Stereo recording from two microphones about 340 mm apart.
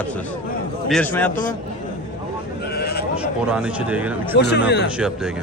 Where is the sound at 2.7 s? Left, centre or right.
Left.